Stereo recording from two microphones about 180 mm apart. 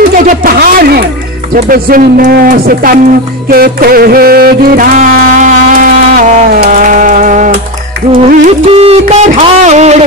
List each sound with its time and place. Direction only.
0.4 s speech: 55° right (ahead or behind)
3.4 s music: 55° right (ahead or behind)
8.2 s a sound: 35° right (ahead or behind)